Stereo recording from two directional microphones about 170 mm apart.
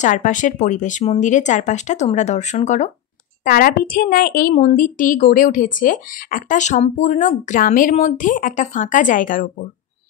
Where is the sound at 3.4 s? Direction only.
55° left (ahead or behind).